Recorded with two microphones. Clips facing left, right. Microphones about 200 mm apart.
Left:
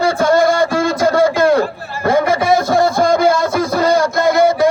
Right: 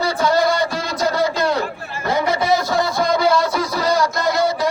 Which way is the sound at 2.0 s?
50° left (ahead or behind).